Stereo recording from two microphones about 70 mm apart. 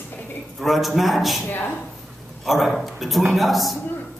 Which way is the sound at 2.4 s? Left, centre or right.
Centre.